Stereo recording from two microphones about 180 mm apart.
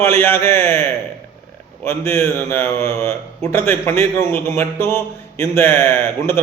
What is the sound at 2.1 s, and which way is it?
A man's voice, 15° left (ahead or behind).